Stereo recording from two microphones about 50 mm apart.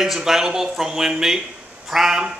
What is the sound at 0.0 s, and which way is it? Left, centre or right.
A man's voice, centre.